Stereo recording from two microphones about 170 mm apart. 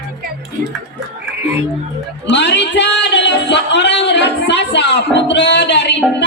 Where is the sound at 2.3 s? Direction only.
90° left.